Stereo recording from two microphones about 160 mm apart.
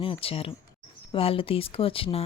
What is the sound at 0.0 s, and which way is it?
Speech, 35° left (ahead or behind).